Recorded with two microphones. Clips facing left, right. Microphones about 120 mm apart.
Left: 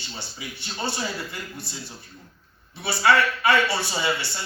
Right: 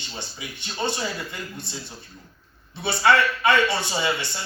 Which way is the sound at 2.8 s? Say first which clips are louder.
Right 1 dB; 20° right (ahead or behind).